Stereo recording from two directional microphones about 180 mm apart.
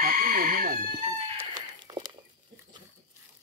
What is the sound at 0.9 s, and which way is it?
Music, 30° right (ahead or behind).